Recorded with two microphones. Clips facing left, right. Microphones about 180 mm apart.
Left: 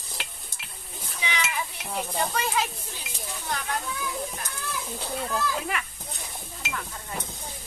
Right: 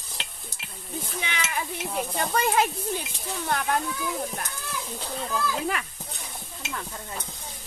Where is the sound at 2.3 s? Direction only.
55° right (ahead or behind).